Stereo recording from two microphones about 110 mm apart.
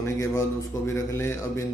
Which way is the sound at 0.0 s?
30° left (ahead or behind).